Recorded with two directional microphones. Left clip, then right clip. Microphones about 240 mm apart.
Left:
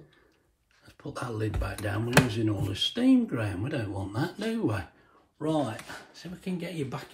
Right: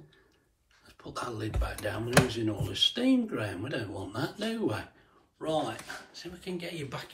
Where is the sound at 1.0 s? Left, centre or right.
Left.